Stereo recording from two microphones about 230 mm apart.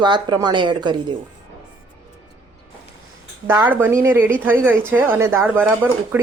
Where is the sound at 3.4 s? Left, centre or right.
Centre.